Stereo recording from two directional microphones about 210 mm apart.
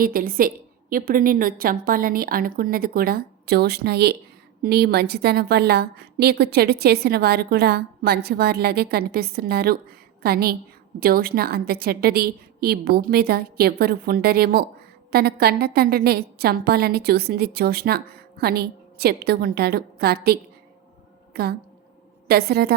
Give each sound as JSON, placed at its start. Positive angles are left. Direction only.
{"t": 0.0, "sound": "a woman's voice", "side_deg": -45}